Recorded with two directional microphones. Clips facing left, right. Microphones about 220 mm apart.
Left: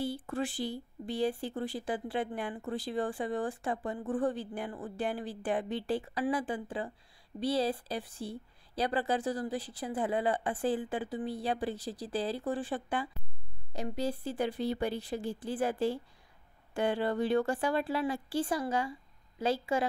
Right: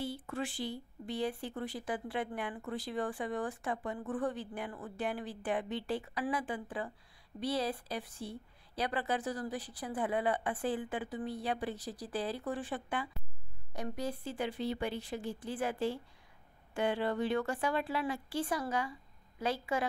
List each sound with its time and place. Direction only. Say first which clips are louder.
0.0 s a woman's voice: left 4 dB; 35° left (ahead or behind)